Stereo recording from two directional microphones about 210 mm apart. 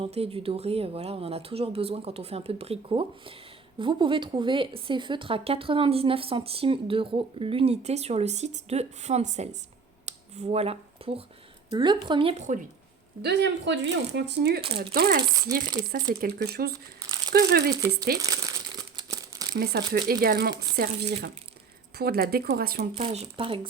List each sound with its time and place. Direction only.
0.0 s speech: 30° right (ahead or behind)
10.1 s a sound: 30° right (ahead or behind)
11.7 s speech: 20° right (ahead or behind)
13.2 s speech: 55° right (ahead or behind)
18.2 s speech: 15° right (ahead or behind)
19.5 s speech: 50° right (ahead or behind)
23.0 s speech: 25° right (ahead or behind)